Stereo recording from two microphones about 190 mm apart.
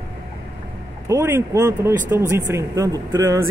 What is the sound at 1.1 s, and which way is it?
Speech, 15° right (ahead or behind).